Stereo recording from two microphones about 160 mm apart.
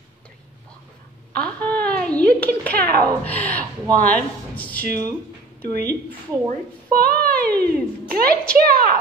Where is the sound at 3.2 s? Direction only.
10° left (ahead or behind).